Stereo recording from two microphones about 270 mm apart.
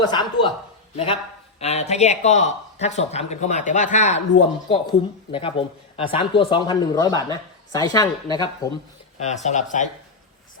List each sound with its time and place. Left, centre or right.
0.1 s speech: centre
9.1 s speech: left